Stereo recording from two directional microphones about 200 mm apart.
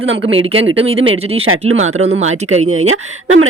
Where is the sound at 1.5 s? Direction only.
90° right.